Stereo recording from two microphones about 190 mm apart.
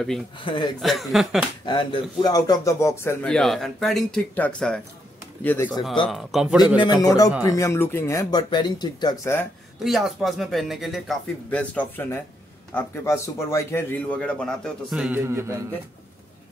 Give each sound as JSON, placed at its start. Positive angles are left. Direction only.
{"t": 0.4, "sound": "a man's voice", "side_deg": 25}
{"t": 0.7, "sound": "speech", "side_deg": 0}
{"t": 1.7, "sound": "a man's voice", "side_deg": 25}
{"t": 6.0, "sound": "speech", "side_deg": 0}
{"t": 6.8, "sound": "a man's voice", "side_deg": 20}
{"t": 9.8, "sound": "a man's voice", "side_deg": 0}